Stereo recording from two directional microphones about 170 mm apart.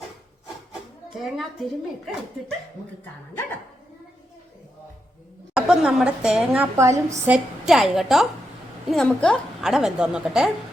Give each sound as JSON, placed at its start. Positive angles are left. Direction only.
{"t": 0.7, "sound": "a sound", "side_deg": 0}
{"t": 5.5, "sound": "a woman's voice", "side_deg": -5}
{"t": 6.7, "sound": "a woman's voice", "side_deg": -15}
{"t": 7.3, "sound": "a woman's voice", "side_deg": -5}